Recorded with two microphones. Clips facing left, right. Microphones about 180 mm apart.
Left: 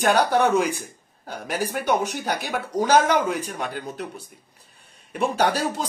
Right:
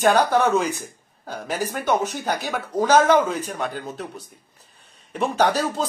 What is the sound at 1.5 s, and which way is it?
A man's voice, 15° left (ahead or behind).